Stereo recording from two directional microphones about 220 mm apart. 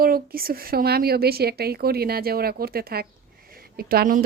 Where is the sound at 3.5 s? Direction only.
45° right (ahead or behind).